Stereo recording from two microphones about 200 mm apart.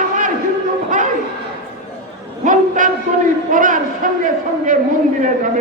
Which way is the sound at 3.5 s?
40° right (ahead or behind).